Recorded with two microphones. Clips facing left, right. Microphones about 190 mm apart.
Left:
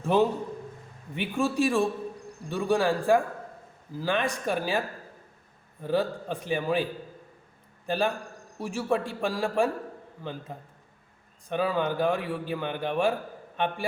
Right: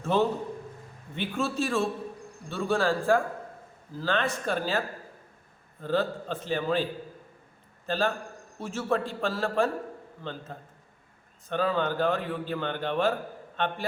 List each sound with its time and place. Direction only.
0.0 s a man's voice: 15° left (ahead or behind)
5.8 s a man's voice: 10° left (ahead or behind)
7.9 s a man's voice: 15° left (ahead or behind)